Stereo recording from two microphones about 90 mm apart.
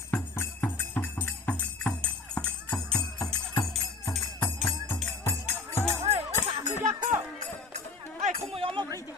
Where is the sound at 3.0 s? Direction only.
45° left (ahead or behind).